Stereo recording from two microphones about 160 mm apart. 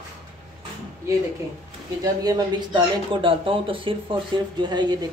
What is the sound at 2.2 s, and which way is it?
Speech, 25° right (ahead or behind).